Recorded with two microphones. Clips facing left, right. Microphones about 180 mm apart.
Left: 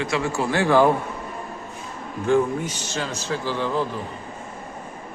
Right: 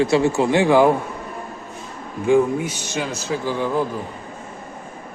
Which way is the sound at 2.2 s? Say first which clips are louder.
Right 4 dB; 10° right (ahead or behind).